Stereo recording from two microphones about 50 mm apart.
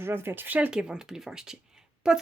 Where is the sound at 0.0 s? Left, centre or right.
Right.